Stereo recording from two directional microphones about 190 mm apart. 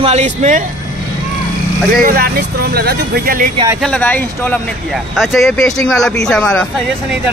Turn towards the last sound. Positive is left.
turn(degrees=5)  # may be behind; listen again after turning